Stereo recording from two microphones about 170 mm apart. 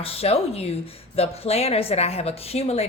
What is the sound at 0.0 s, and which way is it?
A woman's voice, 35° left (ahead or behind).